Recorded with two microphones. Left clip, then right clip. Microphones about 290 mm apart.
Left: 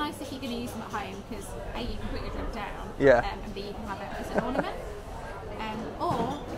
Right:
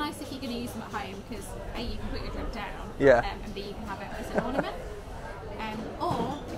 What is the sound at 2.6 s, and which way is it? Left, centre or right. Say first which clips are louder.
A woman's voice: even; centre.